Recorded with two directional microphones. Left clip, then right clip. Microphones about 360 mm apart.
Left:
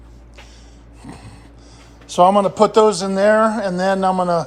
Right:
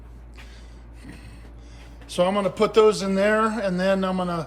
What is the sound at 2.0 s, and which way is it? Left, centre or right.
A man's voice, centre.